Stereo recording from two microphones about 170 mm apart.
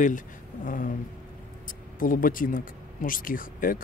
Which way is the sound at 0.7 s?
50° left (ahead or behind).